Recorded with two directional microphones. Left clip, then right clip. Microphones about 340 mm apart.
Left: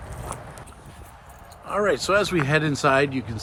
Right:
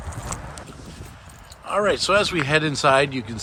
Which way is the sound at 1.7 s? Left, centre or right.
Centre.